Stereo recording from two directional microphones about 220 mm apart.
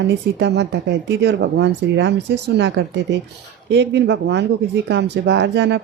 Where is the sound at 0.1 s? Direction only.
50° right (ahead or behind).